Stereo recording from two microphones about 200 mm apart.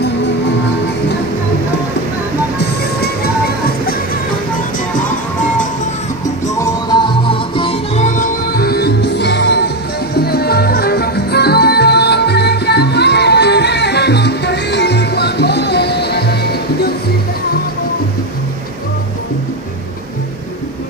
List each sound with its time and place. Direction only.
6.5 s music: 20° left (ahead or behind); by 16.3 s 55° left (ahead or behind)